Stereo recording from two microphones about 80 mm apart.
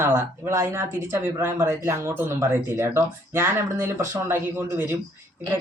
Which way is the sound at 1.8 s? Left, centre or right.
Right.